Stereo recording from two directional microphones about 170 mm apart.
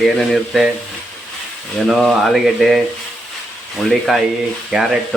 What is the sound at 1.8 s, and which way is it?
Stir, centre (ahead or behind).